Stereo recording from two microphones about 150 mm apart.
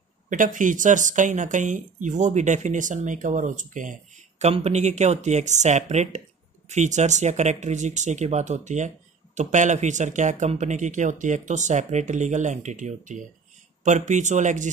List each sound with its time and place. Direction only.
0.3 s speech: 60° right (ahead or behind)
4.5 s speech: 45° right (ahead or behind)